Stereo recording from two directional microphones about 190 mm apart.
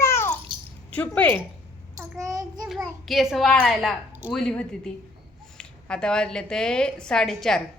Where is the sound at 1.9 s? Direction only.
15° right (ahead or behind).